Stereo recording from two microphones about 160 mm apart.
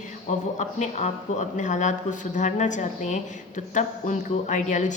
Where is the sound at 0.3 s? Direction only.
50° left (ahead or behind).